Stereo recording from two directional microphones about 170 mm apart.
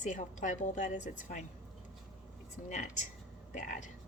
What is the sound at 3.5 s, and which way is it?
Speech, 50° left (ahead or behind).